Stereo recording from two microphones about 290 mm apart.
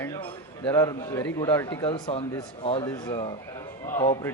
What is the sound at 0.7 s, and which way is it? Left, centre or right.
Speech, centre.